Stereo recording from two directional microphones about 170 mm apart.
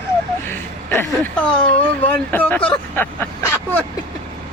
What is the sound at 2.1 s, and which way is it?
Speech, 10° left (ahead or behind).